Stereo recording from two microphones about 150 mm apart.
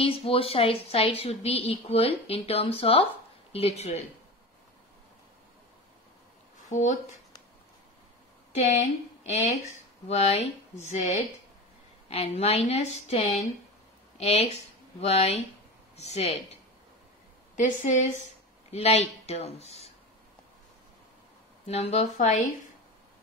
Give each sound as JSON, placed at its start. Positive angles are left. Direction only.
{"t": 0.0, "sound": "speech", "side_deg": 40}
{"t": 6.7, "sound": "speech", "side_deg": 55}
{"t": 8.5, "sound": "speech", "side_deg": 50}
{"t": 17.6, "sound": "speech", "side_deg": 55}
{"t": 18.7, "sound": "speech", "side_deg": 45}
{"t": 21.6, "sound": "speech", "side_deg": 45}